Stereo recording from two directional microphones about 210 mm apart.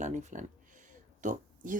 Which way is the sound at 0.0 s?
35° right (ahead or behind).